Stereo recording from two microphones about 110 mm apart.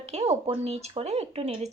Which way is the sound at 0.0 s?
70° right (ahead or behind).